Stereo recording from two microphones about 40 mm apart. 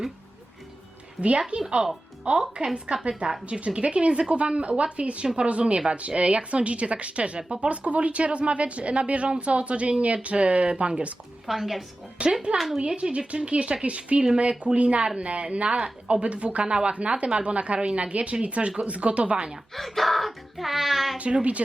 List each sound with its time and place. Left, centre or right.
1.5 s speech: right
11.4 s speech: centre
12.2 s speech: right
12.5 s speech: centre
13.0 s speech: right
19.7 s speech: centre
21.2 s speech: right